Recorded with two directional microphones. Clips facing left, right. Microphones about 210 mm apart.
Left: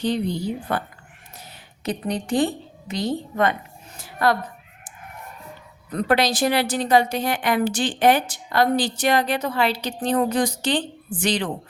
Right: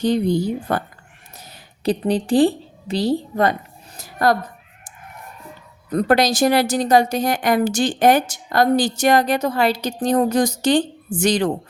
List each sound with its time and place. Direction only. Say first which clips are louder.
0.0 s a woman's voice: right 5 dB; 45° right (ahead or behind)
3.9 s a sound: right 3 dB; 40° right (ahead or behind)
5.9 s a woman's voice: right 4 dB; 40° right (ahead or behind)